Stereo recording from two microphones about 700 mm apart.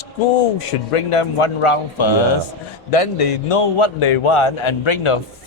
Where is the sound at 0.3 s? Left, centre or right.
Left.